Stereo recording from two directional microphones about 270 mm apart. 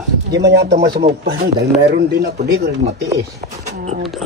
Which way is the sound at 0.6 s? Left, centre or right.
Right.